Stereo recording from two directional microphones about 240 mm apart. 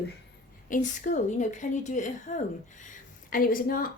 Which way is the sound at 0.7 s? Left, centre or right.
Left.